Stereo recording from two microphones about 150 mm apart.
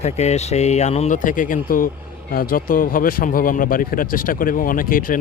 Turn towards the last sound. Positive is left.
turn(degrees=70)  # may be behind; listen again after turning